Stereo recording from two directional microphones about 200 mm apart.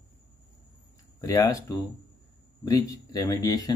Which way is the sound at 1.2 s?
15° left (ahead or behind).